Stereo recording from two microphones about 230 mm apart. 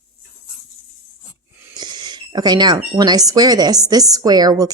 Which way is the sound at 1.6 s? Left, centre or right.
Centre.